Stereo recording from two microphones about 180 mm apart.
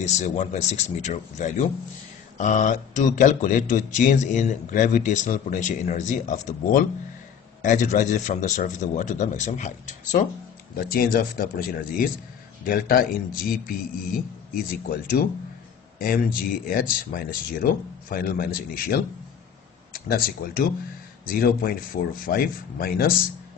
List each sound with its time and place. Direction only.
0.0 s speech: 40° left (ahead or behind)
10.8 s speech: 55° left (ahead or behind)
20.1 s speech: 55° left (ahead or behind)